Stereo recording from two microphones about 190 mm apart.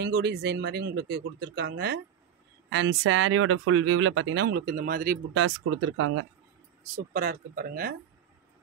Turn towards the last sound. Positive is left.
turn(degrees=-50)  # may be behind; listen again after turning